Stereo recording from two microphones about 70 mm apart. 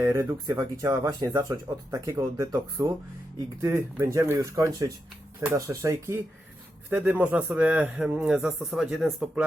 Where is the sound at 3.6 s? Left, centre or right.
Right.